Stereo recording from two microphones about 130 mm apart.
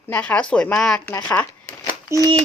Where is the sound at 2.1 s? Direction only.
20° right (ahead or behind).